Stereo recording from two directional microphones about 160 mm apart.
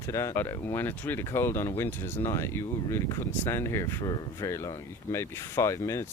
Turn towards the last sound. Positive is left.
turn(degrees=15)  # may be behind; listen again after turning